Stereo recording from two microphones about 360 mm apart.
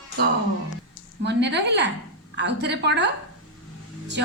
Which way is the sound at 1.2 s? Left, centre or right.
Right.